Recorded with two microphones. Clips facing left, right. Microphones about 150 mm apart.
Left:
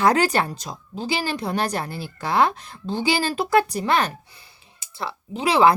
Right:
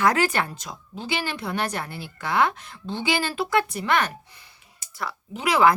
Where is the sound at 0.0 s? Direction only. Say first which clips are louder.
Left 3 dB; 35° left (ahead or behind).